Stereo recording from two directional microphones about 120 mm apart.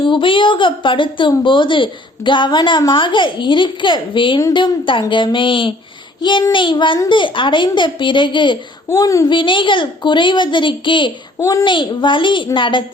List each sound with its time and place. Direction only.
0.0 s a woman's voice: 45° left (ahead or behind)
8.9 s a child's voice: 25° left (ahead or behind)
9.3 s a woman's voice: 45° left (ahead or behind)
11.3 s a child's voice: 25° left (ahead or behind)
11.6 s a woman's voice: 40° left (ahead or behind)